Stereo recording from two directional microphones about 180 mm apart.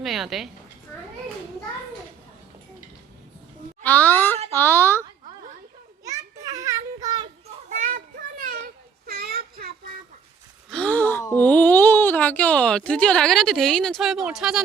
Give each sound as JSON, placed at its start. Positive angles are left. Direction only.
{"t": 0.0, "sound": "a woman's voice", "side_deg": 0}
{"t": 3.8, "sound": "speech", "side_deg": 10}
{"t": 4.5, "sound": "a sound", "side_deg": 10}
{"t": 6.1, "sound": "children playing", "side_deg": -15}
{"t": 7.7, "sound": "children playing", "side_deg": -45}
{"t": 10.7, "sound": "speech", "side_deg": 5}